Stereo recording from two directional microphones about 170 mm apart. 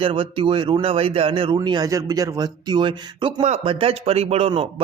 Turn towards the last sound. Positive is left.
turn(degrees=-35)  # may be behind; listen again after turning